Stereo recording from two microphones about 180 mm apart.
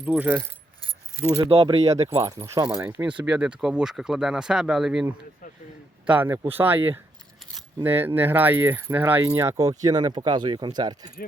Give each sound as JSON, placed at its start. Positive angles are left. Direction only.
{"t": 0.0, "sound": "speech", "side_deg": -10}
{"t": 0.8, "sound": "keys jangling", "side_deg": 20}
{"t": 1.7, "sound": "speech", "side_deg": -35}
{"t": 2.2, "sound": "speech", "side_deg": -15}
{"t": 2.8, "sound": "speech", "side_deg": -10}